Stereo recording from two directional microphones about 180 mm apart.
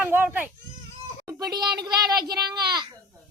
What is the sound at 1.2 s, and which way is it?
A child's voice, 20° right (ahead or behind).